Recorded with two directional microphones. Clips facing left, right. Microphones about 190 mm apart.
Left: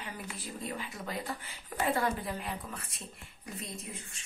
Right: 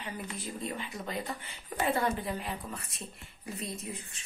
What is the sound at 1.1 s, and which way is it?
Speech, centre (ahead or behind).